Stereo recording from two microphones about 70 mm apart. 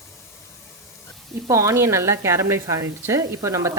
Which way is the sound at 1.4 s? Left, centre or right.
Right.